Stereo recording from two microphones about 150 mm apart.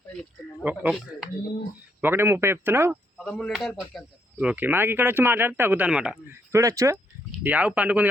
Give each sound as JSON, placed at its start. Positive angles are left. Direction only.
{"t": 0.6, "sound": "speech", "side_deg": -10}
{"t": 2.0, "sound": "speech", "side_deg": -15}
{"t": 3.2, "sound": "speech", "side_deg": 5}
{"t": 6.5, "sound": "speech", "side_deg": -20}
{"t": 7.3, "sound": "speech", "side_deg": -10}